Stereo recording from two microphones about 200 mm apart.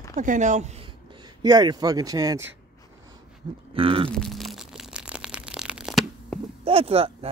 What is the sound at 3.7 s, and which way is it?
Speech, 25° right (ahead or behind).